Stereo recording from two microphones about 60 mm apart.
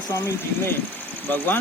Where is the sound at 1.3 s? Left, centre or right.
Left.